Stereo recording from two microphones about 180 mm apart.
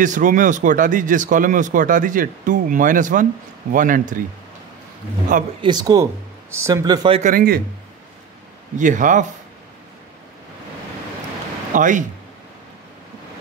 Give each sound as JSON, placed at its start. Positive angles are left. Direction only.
{"t": 0.0, "sound": "speech", "side_deg": -45}
{"t": 5.6, "sound": "speech", "side_deg": -25}
{"t": 7.2, "sound": "speech", "side_deg": -50}
{"t": 8.7, "sound": "speech", "side_deg": -45}
{"t": 11.7, "sound": "speech", "side_deg": -45}